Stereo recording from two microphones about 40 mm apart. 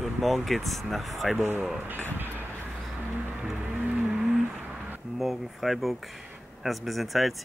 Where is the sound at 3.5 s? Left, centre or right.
Right.